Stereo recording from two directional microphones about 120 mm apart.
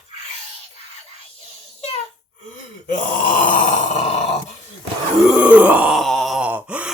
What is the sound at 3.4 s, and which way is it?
Wail, 90° left.